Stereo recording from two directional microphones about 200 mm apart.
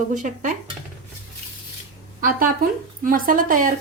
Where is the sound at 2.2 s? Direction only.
45° right (ahead or behind).